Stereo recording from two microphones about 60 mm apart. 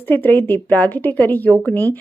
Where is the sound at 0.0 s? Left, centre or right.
Left.